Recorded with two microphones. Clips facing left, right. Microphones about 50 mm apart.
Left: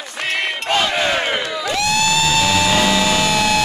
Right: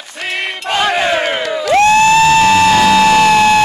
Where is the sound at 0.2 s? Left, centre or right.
Centre.